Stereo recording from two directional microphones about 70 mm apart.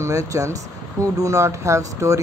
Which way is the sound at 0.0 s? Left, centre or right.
Right.